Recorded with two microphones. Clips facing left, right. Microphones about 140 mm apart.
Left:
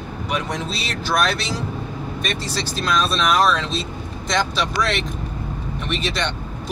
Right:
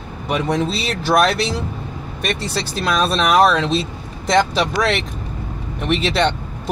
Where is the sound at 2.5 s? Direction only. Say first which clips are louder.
Right 1 dB; 65° right (ahead or behind).